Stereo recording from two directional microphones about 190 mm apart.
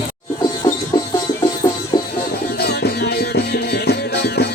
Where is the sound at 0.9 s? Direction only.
20° left (ahead or behind).